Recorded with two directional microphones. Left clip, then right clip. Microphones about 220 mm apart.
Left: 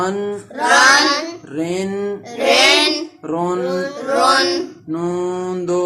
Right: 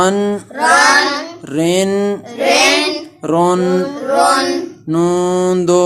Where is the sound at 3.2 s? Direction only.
45° right (ahead or behind).